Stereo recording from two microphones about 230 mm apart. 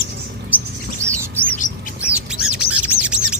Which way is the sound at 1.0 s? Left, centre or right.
Centre.